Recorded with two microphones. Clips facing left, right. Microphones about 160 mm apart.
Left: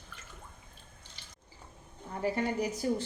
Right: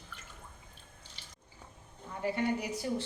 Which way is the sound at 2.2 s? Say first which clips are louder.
Left 1 dB; 45° left (ahead or behind).